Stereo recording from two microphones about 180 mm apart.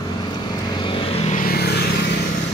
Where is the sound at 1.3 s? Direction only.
50° left (ahead or behind).